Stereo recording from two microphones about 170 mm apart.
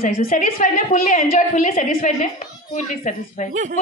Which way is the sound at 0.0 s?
55° left (ahead or behind).